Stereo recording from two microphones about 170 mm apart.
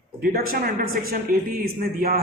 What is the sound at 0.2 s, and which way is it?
Speech, 60° right (ahead or behind).